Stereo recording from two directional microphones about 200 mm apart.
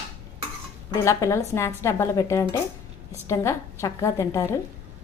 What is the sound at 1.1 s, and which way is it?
A woman's voice, 15° left (ahead or behind).